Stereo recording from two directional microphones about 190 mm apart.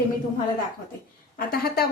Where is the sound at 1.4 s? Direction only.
50° left (ahead or behind).